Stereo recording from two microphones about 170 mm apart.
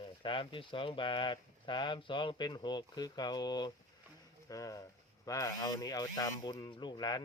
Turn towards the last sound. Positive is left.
turn(degrees=25)  # may be behind; listen again after turning